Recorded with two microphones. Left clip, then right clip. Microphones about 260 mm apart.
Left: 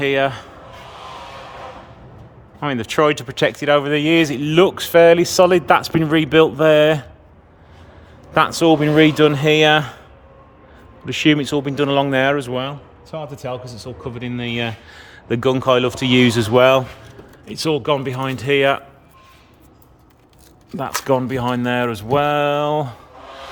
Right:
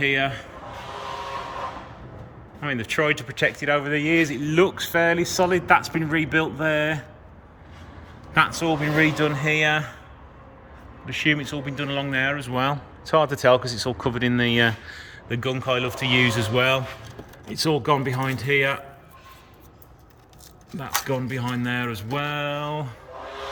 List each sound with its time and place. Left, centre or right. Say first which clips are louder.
0.0 s speech: left 5 dB; centre
2.6 s speech: left 7 dB; left
8.3 s a man's voice: left 7 dB; left
11.0 s speech: left 6 dB; left
12.5 s speech: right 1 dB; centre
20.7 s speech: left 8 dB; centre